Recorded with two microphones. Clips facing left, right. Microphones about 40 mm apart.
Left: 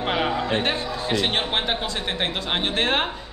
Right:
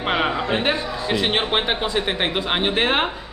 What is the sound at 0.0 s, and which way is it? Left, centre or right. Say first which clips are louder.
Speech: right 2 dB; centre.